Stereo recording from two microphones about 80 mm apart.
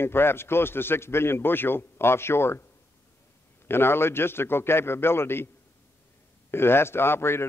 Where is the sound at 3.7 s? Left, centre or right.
Left.